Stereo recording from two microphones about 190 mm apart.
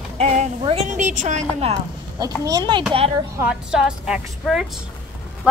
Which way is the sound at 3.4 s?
5° right (ahead or behind).